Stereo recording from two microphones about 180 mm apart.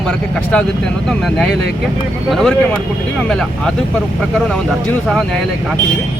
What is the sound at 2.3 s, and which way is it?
Speech, centre (ahead or behind).